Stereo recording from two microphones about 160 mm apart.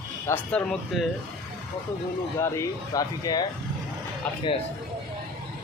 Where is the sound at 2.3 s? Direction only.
15° left (ahead or behind).